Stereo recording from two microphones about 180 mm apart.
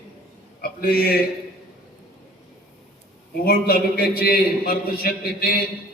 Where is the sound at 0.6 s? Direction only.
55° left (ahead or behind).